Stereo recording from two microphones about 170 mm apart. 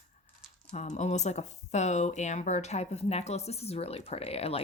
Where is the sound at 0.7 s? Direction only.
45° left (ahead or behind).